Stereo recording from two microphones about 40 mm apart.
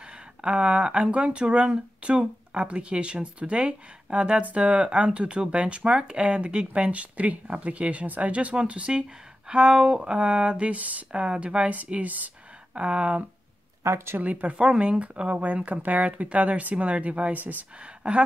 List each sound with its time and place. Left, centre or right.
0.0 s a sound: right
1.1 s speech: right
12.0 s speech: right
12.7 s speech: right
14.5 s speech: right